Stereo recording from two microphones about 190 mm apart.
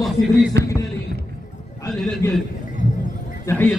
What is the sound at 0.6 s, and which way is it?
Speech, 65° right (ahead or behind).